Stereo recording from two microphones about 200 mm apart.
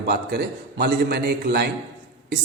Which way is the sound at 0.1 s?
55° right (ahead or behind).